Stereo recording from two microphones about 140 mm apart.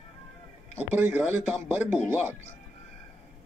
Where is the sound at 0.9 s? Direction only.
15° right (ahead or behind).